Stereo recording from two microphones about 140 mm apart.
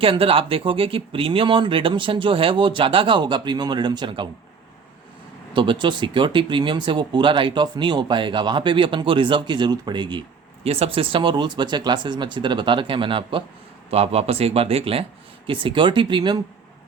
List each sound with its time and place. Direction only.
0.0 s speech: 40° right (ahead or behind)
5.5 s speech: 35° right (ahead or behind)
10.6 s speech: 45° right (ahead or behind)